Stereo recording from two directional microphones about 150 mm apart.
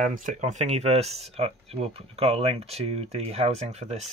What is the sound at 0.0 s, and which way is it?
Speech, 55° right (ahead or behind).